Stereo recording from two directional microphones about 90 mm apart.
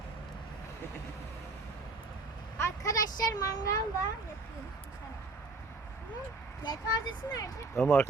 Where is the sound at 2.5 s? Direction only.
35° left (ahead or behind).